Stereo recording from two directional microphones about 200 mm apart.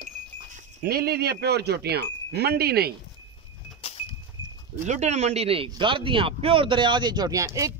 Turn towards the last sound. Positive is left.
turn(degrees=-15)  # may be behind; listen again after turning